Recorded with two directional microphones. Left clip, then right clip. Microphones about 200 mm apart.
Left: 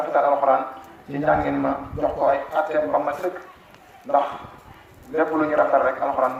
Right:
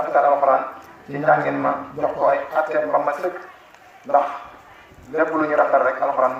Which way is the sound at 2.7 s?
35° left (ahead or behind).